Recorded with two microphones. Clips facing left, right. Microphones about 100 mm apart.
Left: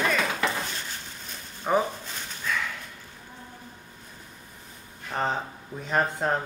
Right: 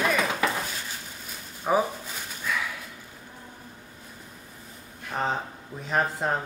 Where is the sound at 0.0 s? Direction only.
10° right (ahead or behind).